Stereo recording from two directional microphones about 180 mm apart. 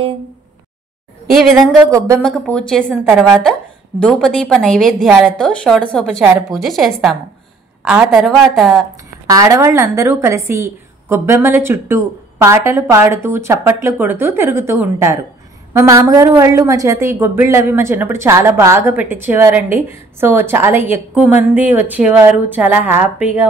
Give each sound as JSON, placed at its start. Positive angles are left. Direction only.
{"t": 1.8, "sound": "a woman's voice", "side_deg": -15}
{"t": 2.2, "sound": "a woman's voice", "side_deg": 5}
{"t": 9.3, "sound": "a woman's voice", "side_deg": -20}